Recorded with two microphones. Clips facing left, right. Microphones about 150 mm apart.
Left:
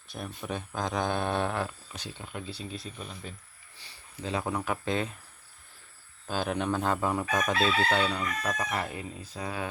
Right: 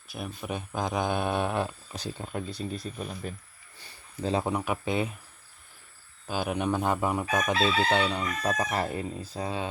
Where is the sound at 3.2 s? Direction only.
50° right (ahead or behind).